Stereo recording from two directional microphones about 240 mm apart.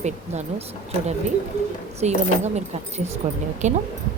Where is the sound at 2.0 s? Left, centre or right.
Right.